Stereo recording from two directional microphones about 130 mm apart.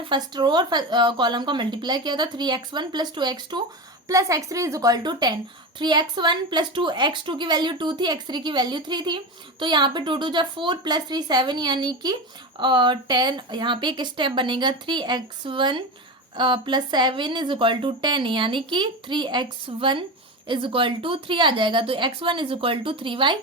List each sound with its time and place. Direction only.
0.0 s a woman's voice: 35° right (ahead or behind)